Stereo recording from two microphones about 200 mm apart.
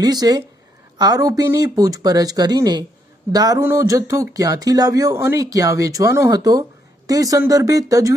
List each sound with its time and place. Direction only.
0.0 s speech: 20° right (ahead or behind)